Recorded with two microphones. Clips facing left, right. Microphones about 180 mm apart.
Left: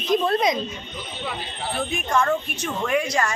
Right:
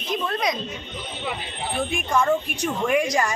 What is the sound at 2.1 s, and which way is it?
A woman's voice, 10° right (ahead or behind).